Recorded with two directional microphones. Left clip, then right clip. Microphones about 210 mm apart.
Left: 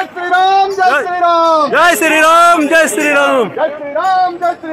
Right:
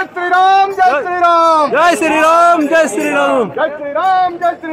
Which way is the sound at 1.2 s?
15° left (ahead or behind).